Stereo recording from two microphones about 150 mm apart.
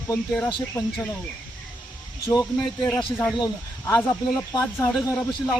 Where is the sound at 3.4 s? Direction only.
20° left (ahead or behind).